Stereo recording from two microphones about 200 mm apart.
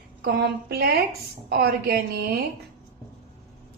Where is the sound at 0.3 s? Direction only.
50° right (ahead or behind).